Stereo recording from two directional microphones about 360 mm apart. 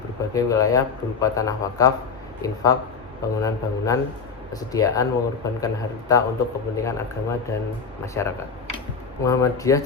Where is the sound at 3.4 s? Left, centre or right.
Centre.